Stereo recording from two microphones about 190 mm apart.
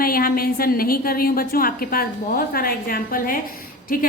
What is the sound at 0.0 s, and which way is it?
A woman's voice, 50° left (ahead or behind).